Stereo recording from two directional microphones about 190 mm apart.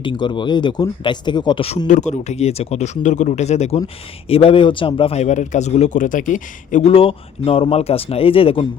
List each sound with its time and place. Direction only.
0.0 s a man's voice: 25° left (ahead or behind)